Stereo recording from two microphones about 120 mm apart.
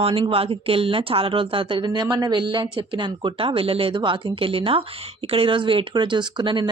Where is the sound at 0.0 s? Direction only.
50° right (ahead or behind).